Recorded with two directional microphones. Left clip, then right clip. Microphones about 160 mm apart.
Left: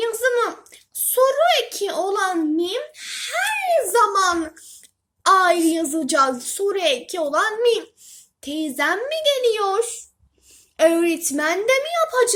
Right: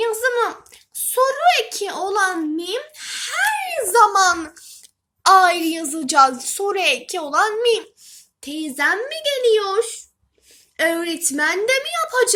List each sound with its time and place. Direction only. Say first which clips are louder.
0.0 s a sound: right 1 dB; 30° right (ahead or behind)
5.2 s a woman's voice: right 2 dB; 30° right (ahead or behind)
10.8 s a child's voice: left 4 dB; 25° right (ahead or behind)